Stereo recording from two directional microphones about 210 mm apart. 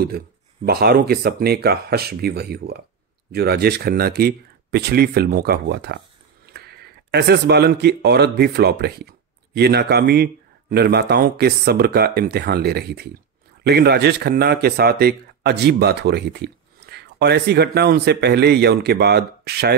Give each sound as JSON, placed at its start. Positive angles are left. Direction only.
{"t": 0.7, "sound": "speech", "side_deg": -50}